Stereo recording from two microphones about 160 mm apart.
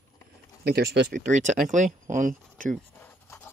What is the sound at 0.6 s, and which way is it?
Speech, 85° right.